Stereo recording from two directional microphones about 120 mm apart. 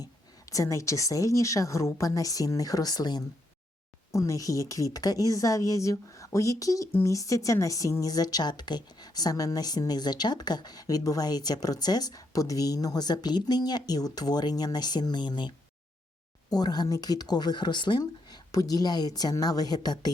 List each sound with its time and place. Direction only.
0.5 s a woman's voice: 25° left (ahead or behind)